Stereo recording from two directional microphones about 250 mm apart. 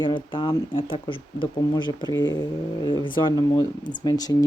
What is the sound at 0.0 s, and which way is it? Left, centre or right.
Speech, centre.